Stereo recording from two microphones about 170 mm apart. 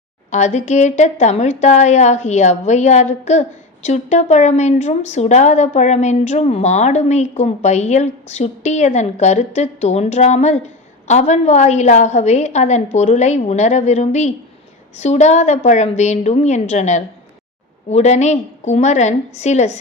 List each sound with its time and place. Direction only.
0.3 s a woman's voice: 40° left (ahead or behind)